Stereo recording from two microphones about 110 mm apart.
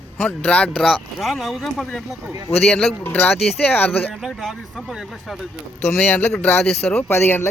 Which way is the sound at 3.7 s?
15° left (ahead or behind).